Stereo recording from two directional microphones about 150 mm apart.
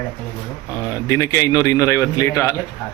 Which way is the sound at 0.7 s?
20° left (ahead or behind).